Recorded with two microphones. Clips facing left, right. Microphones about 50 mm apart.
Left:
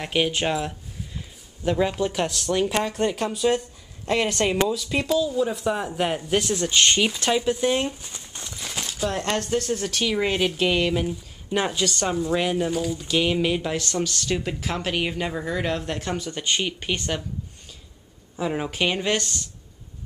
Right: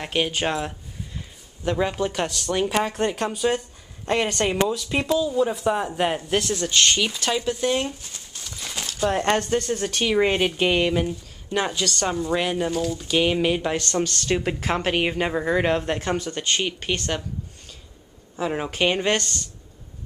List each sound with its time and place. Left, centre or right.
0.0 s speech: centre
8.3 s a sound: left
8.5 s zipper: centre
9.1 s speech: right
9.4 s speech: centre
11.1 s a woman's voice: centre
12.1 s speech: centre
13.1 s speech: centre
15.9 s speech: centre
16.2 s speech: centre
18.3 s a woman's voice: centre
19.1 s speech: centre